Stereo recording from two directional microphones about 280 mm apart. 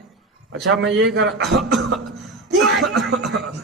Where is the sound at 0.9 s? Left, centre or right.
Centre.